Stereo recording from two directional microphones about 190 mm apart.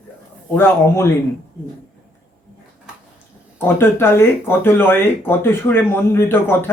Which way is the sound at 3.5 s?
10° left (ahead or behind).